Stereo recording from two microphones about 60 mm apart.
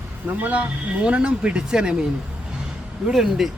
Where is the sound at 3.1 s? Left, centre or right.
Centre.